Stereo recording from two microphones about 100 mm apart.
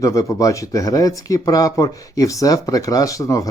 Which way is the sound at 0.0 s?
35° left (ahead or behind).